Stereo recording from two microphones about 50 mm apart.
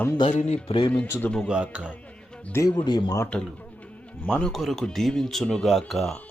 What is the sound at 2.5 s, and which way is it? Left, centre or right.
Speech, left.